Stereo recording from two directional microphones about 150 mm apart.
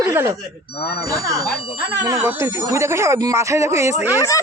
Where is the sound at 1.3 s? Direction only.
90° left.